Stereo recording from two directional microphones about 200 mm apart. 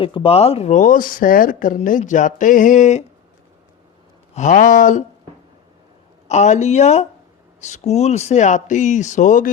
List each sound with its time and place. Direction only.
0.0 s speech: 25° left (ahead or behind)
4.4 s speech: 40° left (ahead or behind)
6.2 s speech: 35° left (ahead or behind)